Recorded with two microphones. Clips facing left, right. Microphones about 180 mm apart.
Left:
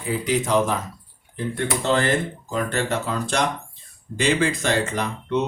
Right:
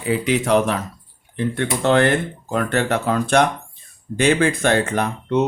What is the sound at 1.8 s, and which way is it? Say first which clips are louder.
Speech: right 5 dB; 60° right (ahead or behind).